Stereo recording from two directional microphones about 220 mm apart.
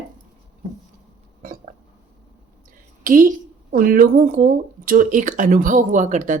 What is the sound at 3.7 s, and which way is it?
Speech, 40° right (ahead or behind).